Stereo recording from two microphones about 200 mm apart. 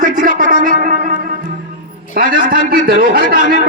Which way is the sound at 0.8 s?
45° right (ahead or behind).